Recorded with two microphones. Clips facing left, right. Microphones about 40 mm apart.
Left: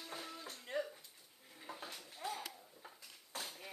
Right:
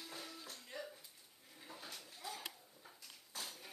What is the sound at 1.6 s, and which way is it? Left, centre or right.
Dishes, centre.